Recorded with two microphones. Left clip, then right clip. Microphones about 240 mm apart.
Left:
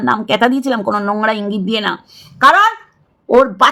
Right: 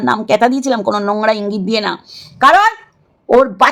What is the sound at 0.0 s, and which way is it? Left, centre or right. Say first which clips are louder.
A woman's voice: right 1 dB; centre.